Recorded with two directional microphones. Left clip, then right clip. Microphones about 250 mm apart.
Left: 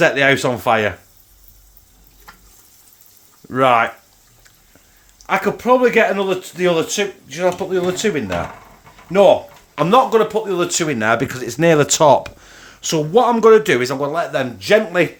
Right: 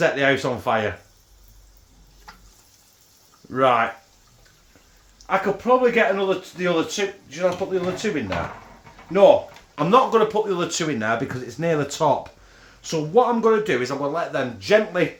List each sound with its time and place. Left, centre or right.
0.0 s speech: left
3.5 s speech: left
5.2 s speech: left
9.1 s speech: left
9.7 s speech: left